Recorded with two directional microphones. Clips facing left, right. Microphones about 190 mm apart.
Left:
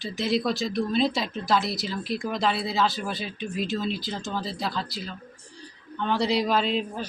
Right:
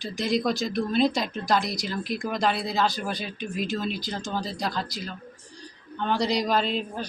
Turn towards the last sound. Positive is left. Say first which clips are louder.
# left 1 dB
turn(degrees=0)  # may be behind; listen again after turning